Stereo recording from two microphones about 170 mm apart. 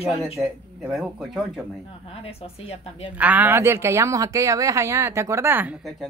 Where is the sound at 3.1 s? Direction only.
10° right (ahead or behind).